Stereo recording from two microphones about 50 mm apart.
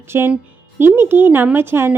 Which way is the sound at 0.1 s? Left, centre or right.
Right.